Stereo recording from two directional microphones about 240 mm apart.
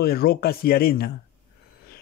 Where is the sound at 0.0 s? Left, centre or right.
Left.